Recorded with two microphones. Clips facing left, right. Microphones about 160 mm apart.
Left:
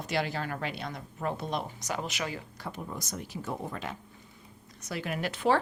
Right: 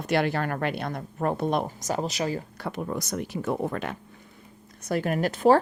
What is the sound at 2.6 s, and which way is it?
Speech, 70° right (ahead or behind).